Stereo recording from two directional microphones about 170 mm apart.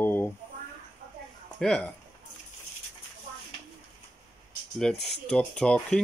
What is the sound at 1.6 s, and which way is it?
Speech, 5° left (ahead or behind).